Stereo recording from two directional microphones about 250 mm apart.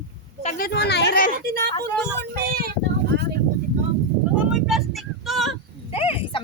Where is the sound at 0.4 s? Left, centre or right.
Left.